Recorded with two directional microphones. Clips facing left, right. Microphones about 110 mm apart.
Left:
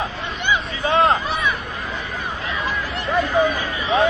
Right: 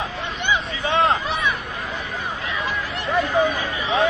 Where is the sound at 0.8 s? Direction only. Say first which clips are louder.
Left 3 dB; 45° left (ahead or behind).